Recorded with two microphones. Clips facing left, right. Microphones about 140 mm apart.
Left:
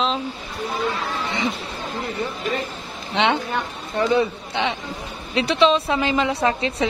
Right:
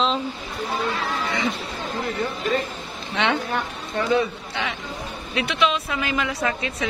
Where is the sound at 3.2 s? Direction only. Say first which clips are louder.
Left 2 dB; 20° left (ahead or behind).